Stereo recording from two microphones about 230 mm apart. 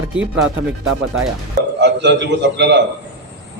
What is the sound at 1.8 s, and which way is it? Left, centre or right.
A man's voice, right.